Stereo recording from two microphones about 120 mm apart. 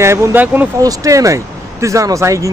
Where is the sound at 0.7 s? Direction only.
30° right (ahead or behind).